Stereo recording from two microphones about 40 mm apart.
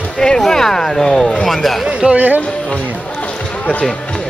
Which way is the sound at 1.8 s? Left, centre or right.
Right.